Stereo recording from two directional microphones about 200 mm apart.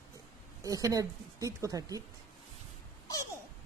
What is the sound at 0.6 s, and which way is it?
A woman's voice, 15° right (ahead or behind).